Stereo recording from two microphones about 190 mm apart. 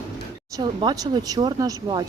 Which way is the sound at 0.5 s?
25° right (ahead or behind).